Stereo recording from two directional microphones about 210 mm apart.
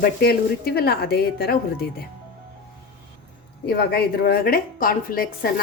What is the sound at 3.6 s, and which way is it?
Speech, 50° left (ahead or behind).